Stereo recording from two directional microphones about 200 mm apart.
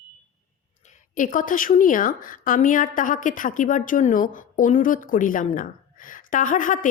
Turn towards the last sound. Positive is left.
turn(degrees=40)  # may be behind; listen again after turning